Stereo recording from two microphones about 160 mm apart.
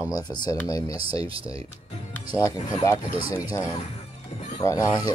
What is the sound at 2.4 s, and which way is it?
Speech, 20° left (ahead or behind).